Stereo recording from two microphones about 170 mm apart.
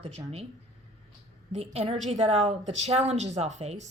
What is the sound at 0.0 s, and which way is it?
Speech, 35° right (ahead or behind).